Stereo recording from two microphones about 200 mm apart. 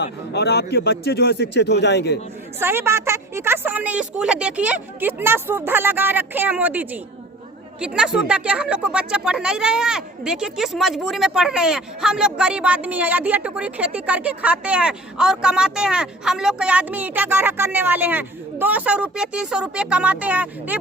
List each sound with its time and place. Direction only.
0.3 s a man's voice: 55° left (ahead or behind)
2.6 s a woman's voice: 10° right (ahead or behind)